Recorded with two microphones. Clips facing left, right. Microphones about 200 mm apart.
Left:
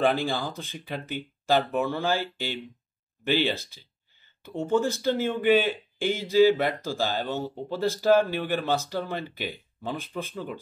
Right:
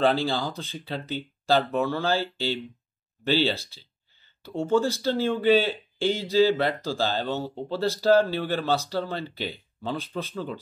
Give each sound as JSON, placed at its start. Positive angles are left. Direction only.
{"t": 0.0, "sound": "speech", "side_deg": 15}